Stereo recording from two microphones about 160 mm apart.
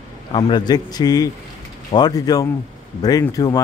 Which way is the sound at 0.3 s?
30° left (ahead or behind).